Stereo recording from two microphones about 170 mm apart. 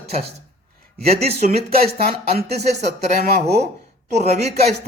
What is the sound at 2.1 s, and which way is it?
Speech, 40° right (ahead or behind).